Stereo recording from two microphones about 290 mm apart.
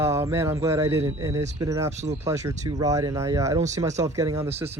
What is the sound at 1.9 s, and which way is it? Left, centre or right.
Speech, right.